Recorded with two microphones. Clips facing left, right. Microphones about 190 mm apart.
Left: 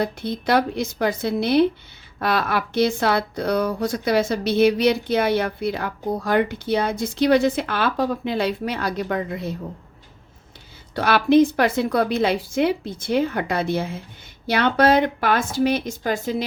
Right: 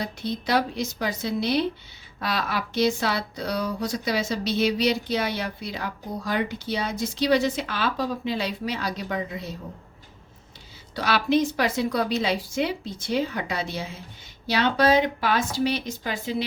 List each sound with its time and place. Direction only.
0.0 s speech: 55° left (ahead or behind)
10.9 s a woman's voice: 55° left (ahead or behind)